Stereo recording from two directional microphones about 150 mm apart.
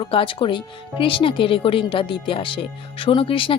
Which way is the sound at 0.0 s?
35° left (ahead or behind).